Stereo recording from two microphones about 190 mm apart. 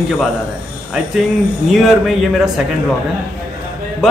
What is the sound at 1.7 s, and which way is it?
Speech, centre (ahead or behind).